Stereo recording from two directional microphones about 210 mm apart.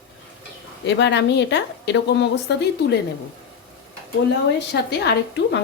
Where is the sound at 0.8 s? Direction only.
55° left (ahead or behind).